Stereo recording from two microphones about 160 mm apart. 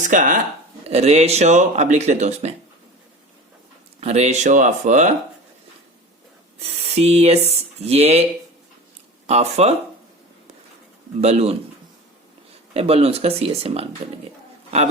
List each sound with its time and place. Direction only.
0.0 s speech: 50° right (ahead or behind)
0.9 s speech: 40° right (ahead or behind)
4.0 s speech: 45° right (ahead or behind)
6.6 s speech: 40° right (ahead or behind)
11.2 s speech: 40° right (ahead or behind)
12.7 s speech: 40° right (ahead or behind)